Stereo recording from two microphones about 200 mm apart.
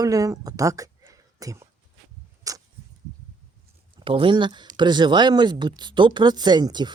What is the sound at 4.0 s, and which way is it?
Speech, 25° right (ahead or behind).